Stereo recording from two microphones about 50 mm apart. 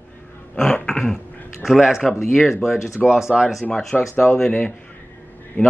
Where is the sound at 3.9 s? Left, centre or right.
Centre.